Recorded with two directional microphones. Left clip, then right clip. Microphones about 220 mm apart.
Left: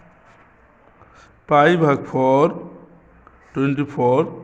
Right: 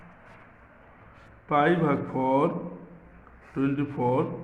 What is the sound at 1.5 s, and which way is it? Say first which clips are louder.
A man's voice: left 9 dB; 50° left (ahead or behind).